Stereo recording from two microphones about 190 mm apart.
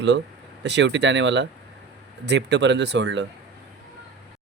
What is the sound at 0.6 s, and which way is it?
Speech, 65° right (ahead or behind).